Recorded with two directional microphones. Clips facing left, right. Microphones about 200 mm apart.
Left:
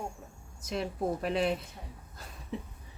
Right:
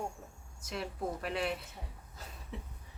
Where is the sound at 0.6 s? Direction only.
20° left (ahead or behind).